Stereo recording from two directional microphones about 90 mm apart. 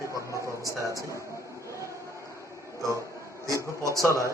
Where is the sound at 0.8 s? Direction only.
40° right (ahead or behind).